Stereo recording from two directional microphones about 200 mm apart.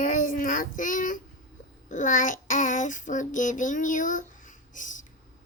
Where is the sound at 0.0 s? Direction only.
40° left (ahead or behind).